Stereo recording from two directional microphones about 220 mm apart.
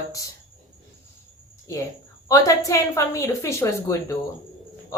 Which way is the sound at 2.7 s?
15° left (ahead or behind).